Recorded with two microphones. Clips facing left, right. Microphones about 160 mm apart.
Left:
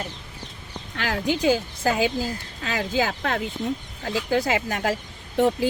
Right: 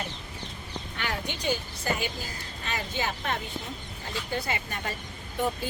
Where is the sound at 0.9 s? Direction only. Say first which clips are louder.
Left 10 dB; 90° left.